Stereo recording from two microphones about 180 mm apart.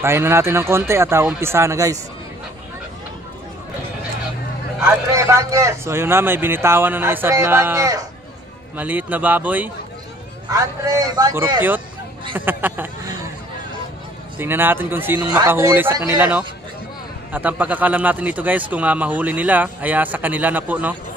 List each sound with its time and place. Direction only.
0.0 s a man's voice: 15° right (ahead or behind)
4.8 s a man's voice: 15° right (ahead or behind)
14.4 s a man's voice: 10° right (ahead or behind)